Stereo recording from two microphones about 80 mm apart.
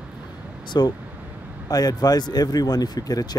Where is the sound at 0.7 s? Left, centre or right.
Left.